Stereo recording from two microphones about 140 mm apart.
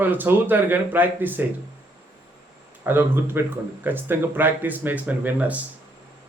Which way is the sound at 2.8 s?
15° right (ahead or behind).